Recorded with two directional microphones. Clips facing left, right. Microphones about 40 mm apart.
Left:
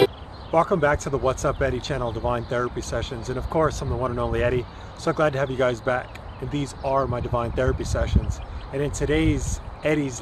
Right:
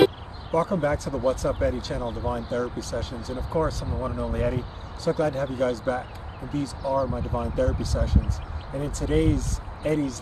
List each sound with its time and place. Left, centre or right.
0.5 s speech: left
5.0 s speech: left
6.5 s speech: left